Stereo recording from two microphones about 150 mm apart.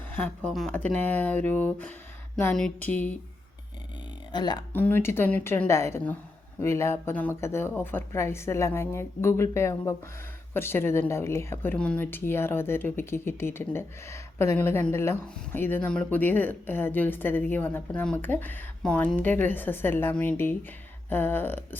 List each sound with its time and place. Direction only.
0.4 s a woman's voice: 5° left (ahead or behind)
4.3 s speech: 30° left (ahead or behind)
4.7 s a woman's voice: 10° left (ahead or behind)